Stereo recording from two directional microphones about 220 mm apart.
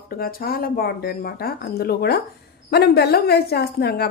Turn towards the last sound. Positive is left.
turn(degrees=45)  # may be behind; listen again after turning